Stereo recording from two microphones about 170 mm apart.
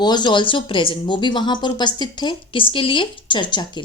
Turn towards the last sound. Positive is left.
turn(degrees=25)  # may be behind; listen again after turning